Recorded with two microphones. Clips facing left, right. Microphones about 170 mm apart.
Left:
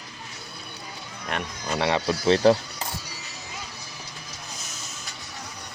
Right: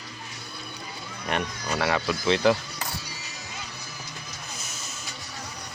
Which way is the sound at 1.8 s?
25° left (ahead or behind).